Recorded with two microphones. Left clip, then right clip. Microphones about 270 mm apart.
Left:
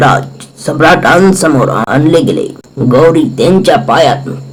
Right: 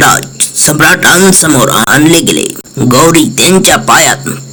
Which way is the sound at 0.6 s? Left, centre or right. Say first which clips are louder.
Even; right.